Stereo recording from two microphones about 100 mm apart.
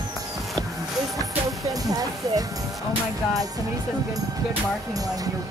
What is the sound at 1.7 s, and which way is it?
Music, 35° right (ahead or behind).